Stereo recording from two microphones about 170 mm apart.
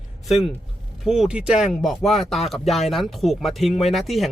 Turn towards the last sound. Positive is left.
turn(degrees=0)  # may be behind; listen again after turning